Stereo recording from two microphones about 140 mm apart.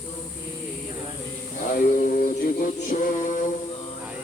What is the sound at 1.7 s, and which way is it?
Mantra, 70° left (ahead or behind).